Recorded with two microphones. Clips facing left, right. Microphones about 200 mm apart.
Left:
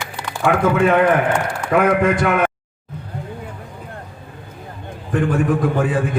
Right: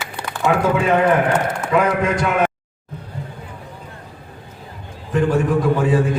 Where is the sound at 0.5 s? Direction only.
60° left (ahead or behind).